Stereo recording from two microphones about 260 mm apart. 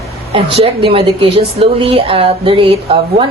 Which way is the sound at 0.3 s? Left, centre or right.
Right.